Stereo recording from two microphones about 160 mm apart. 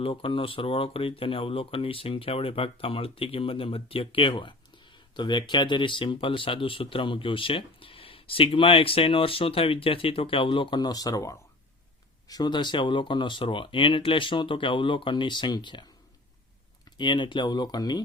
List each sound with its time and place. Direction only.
0.0 s speech: 35° left (ahead or behind)
17.0 s speech: 30° left (ahead or behind)